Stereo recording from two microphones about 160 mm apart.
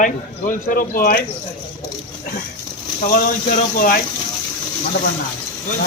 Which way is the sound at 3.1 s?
60° left (ahead or behind).